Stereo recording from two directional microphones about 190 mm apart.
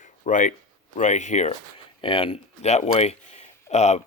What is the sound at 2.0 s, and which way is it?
Speech, 25° left (ahead or behind).